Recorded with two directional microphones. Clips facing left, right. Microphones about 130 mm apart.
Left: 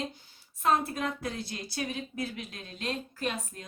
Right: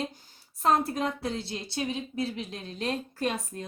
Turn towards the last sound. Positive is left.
turn(degrees=-35)  # may be behind; listen again after turning